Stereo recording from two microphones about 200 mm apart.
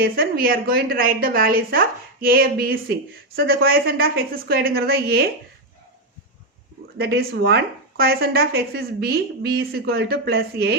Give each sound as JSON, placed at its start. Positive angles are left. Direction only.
{"t": 0.0, "sound": "a woman's voice", "side_deg": -50}
{"t": 7.0, "sound": "a woman's voice", "side_deg": -55}